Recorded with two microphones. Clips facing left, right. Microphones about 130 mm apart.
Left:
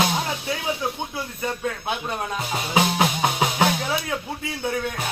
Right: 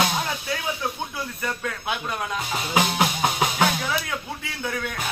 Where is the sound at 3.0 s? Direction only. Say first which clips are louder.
Left 1 dB; 25° left (ahead or behind).